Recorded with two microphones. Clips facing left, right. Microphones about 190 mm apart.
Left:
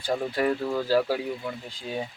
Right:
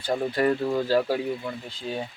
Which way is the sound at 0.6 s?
10° right (ahead or behind).